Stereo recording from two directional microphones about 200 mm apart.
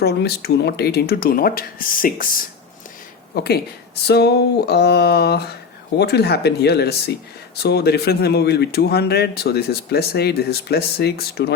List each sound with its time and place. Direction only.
0.0 s speech: 55° left (ahead or behind)
4.0 s a sound: 55° left (ahead or behind)
7.6 s speech: 55° left (ahead or behind)